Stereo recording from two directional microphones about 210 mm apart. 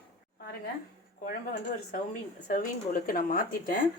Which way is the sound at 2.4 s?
40° left (ahead or behind).